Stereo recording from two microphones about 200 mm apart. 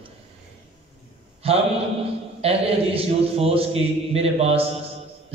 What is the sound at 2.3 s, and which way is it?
A man's voice, 30° right (ahead or behind).